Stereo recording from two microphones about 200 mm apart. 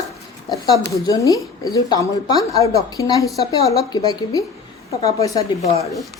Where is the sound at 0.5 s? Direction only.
20° left (ahead or behind).